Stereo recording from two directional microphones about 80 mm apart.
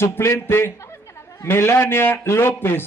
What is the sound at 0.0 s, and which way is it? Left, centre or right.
A man's voice, left.